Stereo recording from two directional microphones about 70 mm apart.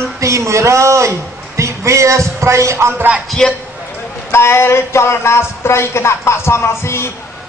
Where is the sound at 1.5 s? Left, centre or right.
Right.